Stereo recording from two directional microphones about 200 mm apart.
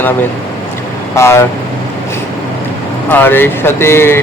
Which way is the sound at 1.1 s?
15° left (ahead or behind).